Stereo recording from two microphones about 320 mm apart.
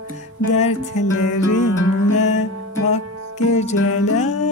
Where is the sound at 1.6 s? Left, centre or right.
Right.